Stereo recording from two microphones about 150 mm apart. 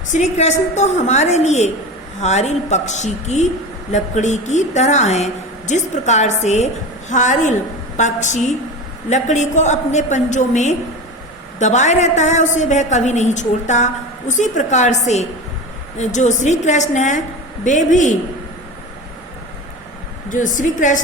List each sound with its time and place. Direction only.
0.1 s a woman's voice: 50° left (ahead or behind)
20.3 s a woman's voice: 60° left (ahead or behind)